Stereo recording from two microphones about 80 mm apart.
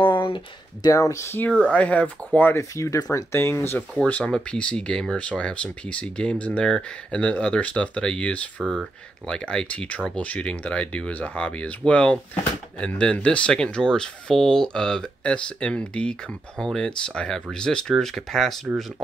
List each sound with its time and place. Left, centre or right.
0.0 s a sound: left
0.8 s speech: left
1.6 s speech: centre
2.5 s speech: left
4.0 s speech: centre